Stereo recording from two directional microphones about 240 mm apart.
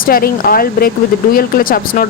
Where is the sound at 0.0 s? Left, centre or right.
Left.